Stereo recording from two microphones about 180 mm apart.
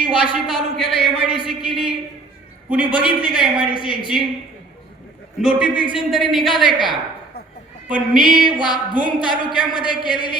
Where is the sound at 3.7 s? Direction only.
25° left (ahead or behind).